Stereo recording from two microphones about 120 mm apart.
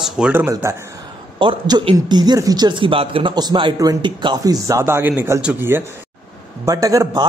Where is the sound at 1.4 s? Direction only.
40° right (ahead or behind); by 5.8 s 20° right (ahead or behind).